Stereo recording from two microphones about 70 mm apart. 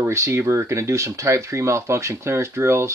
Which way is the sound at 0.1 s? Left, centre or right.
Right.